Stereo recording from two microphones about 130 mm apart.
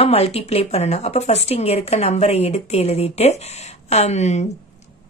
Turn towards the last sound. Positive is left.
turn(degrees=60)  # may be behind; listen again after turning